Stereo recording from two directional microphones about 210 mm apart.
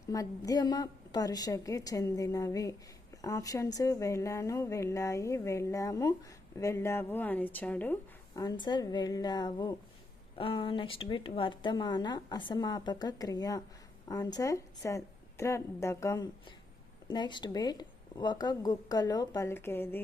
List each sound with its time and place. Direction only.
0.1 s speech: 15° left (ahead or behind)
8.4 s a woman's voice: 20° left (ahead or behind)